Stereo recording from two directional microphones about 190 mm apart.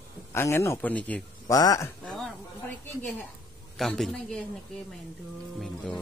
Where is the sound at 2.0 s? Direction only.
Centre (ahead or behind).